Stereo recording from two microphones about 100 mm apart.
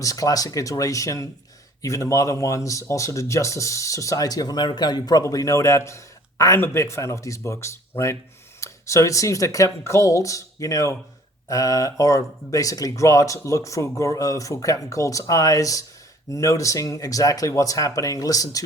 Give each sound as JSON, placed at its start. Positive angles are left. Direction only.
{"t": 0.0, "sound": "speech", "side_deg": 35}